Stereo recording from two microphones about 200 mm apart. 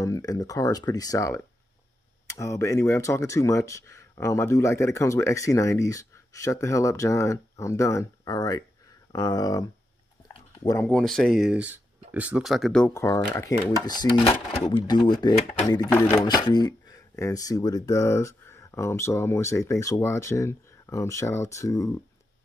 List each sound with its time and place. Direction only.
0.0 s speech: 15° left (ahead or behind)
12.9 s speech: 15° left (ahead or behind)